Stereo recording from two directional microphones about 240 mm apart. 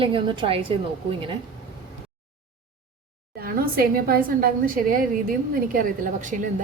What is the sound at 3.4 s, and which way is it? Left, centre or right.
A woman's voice, right.